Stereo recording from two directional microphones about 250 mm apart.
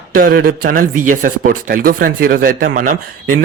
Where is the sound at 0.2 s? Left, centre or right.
Right.